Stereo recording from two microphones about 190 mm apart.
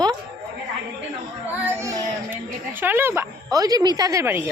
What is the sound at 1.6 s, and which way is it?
A child's voice, 15° right (ahead or behind).